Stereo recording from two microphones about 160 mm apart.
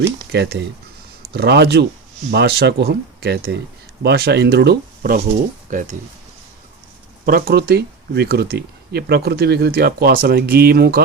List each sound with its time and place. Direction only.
0.3 s speech: 90° right
5.7 s speech: 55° right (ahead or behind)
7.3 s speech: 70° right (ahead or behind)